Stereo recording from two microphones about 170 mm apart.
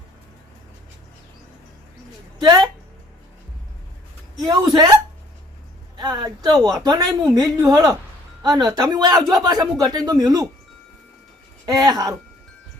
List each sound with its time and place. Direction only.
2.4 s a woman's voice: 25° right (ahead or behind)
4.4 s a woman's voice: 25° right (ahead or behind)
6.0 s a woman's voice: 25° right (ahead or behind)
11.6 s a woman's voice: 20° right (ahead or behind)